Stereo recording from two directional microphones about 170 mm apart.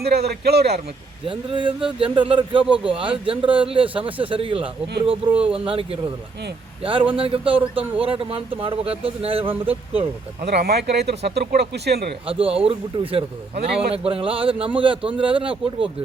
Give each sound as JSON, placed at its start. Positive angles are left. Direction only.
{"t": 0.0, "sound": "speech", "side_deg": -70}
{"t": 1.2, "sound": "speech", "side_deg": -30}
{"t": 7.2, "sound": "speech", "side_deg": -35}
{"t": 10.4, "sound": "speech", "side_deg": -75}
{"t": 12.2, "sound": "speech", "side_deg": -35}